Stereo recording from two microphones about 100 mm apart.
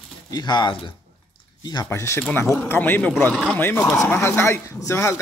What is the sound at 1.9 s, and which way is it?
Speech, 30° left (ahead or behind).